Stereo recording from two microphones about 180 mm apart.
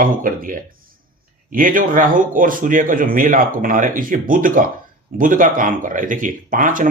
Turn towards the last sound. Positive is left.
turn(degrees=-45)  # may be behind; listen again after turning